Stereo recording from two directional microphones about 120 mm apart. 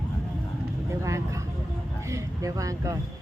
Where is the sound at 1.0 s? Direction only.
25° right (ahead or behind).